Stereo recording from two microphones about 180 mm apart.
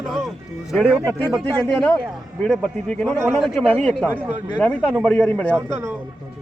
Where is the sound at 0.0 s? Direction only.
5° left (ahead or behind).